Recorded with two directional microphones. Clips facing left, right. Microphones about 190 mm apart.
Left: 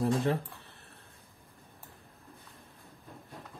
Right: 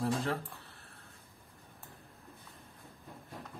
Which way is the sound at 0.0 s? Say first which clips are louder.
Left 5 dB; 20° left (ahead or behind).